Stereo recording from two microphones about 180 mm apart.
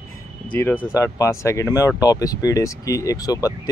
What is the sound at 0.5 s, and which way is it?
Speech, 10° left (ahead or behind).